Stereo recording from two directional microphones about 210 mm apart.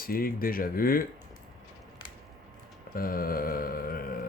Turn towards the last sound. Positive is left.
turn(degrees=45)  # may be behind; listen again after turning